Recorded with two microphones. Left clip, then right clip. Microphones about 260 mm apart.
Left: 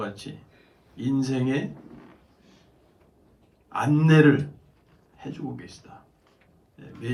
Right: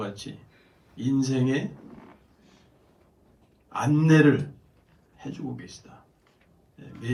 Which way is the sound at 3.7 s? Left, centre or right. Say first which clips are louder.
Left 1 dB; left.